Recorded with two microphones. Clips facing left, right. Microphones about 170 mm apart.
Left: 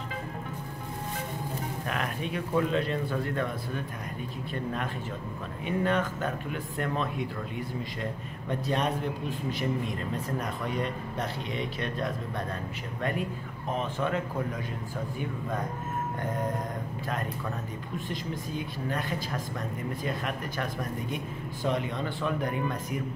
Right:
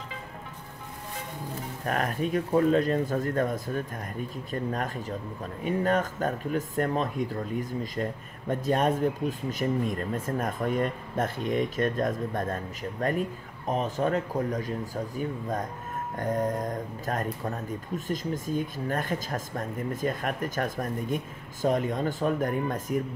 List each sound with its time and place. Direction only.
1.9 s speech: 40° right (ahead or behind)
5.6 s speech: 40° right (ahead or behind)
13.7 s speech: 40° right (ahead or behind)
16.2 s speech: 45° right (ahead or behind)